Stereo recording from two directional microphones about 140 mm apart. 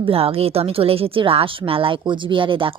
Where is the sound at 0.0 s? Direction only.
40° right (ahead or behind).